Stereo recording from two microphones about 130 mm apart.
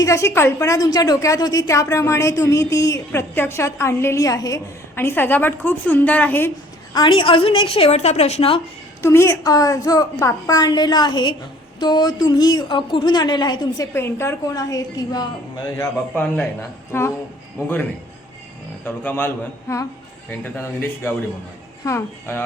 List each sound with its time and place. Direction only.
0.0 s speech: 25° left (ahead or behind)
6.9 s a woman's voice: 40° left (ahead or behind)
9.0 s a woman's voice: 20° left (ahead or behind)
13.9 s speech: 20° left (ahead or behind)
15.8 s a man's voice: 15° left (ahead or behind)
18.9 s a man's voice: 15° left (ahead or behind)